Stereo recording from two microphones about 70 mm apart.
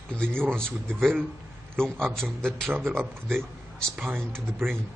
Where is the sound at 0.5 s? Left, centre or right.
Centre.